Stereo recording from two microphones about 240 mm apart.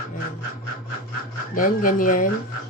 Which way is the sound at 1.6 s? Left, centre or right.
Left.